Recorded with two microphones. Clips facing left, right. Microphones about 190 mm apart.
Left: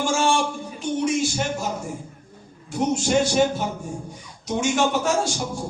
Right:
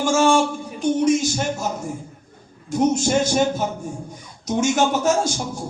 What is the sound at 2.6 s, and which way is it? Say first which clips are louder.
Speech: right 4 dB; 40° right (ahead or behind).